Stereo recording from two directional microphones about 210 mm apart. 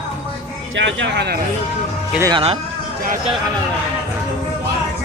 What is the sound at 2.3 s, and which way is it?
Speech, 25° right (ahead or behind).